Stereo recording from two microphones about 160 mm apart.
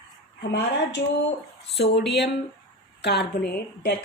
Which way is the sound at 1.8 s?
90° left.